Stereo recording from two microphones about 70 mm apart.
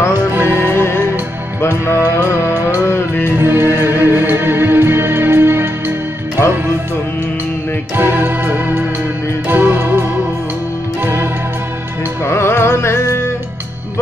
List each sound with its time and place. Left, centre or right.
0.3 s music: right
0.7 s music: left
3.3 s music: right
7.9 s music: right
12.3 s music: left